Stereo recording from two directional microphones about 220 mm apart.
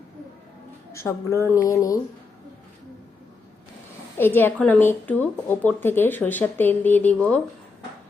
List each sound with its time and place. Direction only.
0.9 s a woman's voice: 15° left (ahead or behind)
4.2 s a woman's voice: 10° left (ahead or behind)